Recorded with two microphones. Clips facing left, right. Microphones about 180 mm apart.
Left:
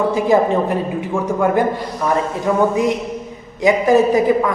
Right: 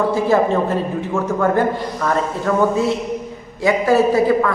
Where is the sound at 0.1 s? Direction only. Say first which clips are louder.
Left 1 dB; 15° left (ahead or behind).